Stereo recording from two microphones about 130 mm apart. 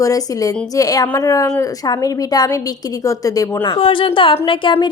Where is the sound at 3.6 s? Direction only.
40° left (ahead or behind).